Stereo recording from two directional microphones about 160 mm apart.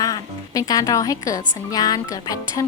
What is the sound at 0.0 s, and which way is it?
A woman's voice, 20° left (ahead or behind).